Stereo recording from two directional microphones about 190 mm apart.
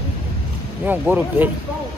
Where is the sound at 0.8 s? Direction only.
10° right (ahead or behind).